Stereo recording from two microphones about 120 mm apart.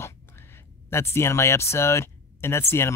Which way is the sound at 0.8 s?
20° left (ahead or behind).